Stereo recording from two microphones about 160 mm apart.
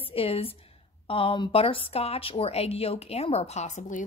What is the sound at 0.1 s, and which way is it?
A woman's voice, 35° left (ahead or behind).